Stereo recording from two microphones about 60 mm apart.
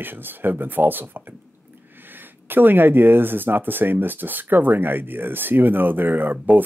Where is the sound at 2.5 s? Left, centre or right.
Right.